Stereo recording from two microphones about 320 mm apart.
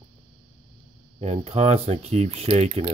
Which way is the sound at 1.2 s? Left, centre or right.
Centre.